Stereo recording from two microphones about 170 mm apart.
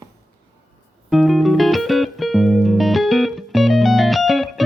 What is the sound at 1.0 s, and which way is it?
Music, centre (ahead or behind).